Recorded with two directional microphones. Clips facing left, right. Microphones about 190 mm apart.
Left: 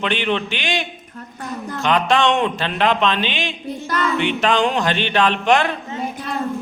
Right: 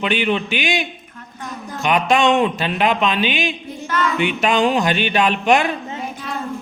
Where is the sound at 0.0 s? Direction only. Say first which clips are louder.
Right 1 dB; 10° right (ahead or behind).